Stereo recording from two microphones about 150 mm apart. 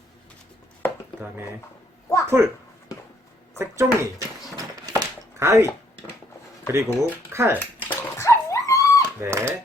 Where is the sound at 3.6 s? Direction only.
20° right (ahead or behind).